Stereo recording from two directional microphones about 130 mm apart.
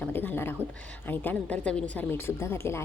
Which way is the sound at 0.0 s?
15° left (ahead or behind).